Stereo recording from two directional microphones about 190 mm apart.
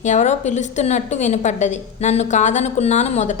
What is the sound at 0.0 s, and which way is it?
A woman's voice, 40° left (ahead or behind).